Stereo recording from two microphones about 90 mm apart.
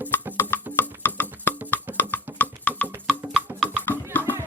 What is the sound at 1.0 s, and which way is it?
Music, 20° left (ahead or behind).